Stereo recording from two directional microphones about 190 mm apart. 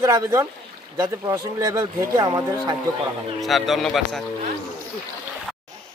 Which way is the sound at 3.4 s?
Centre (ahead or behind).